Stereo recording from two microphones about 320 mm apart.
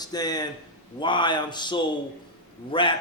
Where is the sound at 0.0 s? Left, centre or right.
Centre.